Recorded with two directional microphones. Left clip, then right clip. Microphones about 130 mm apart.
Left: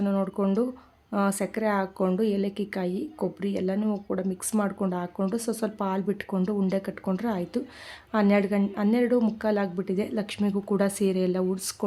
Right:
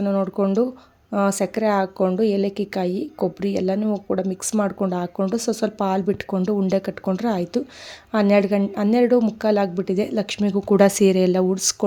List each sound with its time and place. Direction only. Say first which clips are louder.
0.0 s a woman's voice: right 6 dB; 20° right (ahead or behind)
10.8 s speech: right 11 dB; 55° right (ahead or behind); by 11.8 s 40° right (ahead or behind)